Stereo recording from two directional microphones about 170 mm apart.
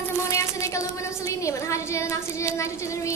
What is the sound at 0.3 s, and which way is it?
A woman's voice, 15° left (ahead or behind).